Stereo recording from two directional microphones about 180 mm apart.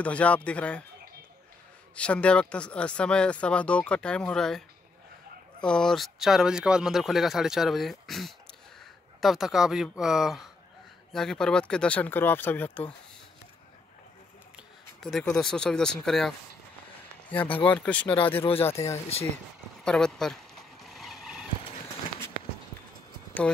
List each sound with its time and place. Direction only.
0.0 s speech: 5° left (ahead or behind)
2.0 s speech: 5° left (ahead or behind)
15.0 s speech: centre (ahead or behind)
17.5 s speech: 30° left (ahead or behind)
17.7 s speech: 5° left (ahead or behind)
18.0 s speech: 30° left (ahead or behind)
19.8 s speech: 5° left (ahead or behind)
20.8 s vehicle: centre (ahead or behind)